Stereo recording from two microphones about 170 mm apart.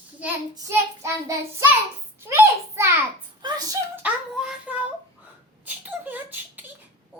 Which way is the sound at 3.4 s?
25° right (ahead or behind).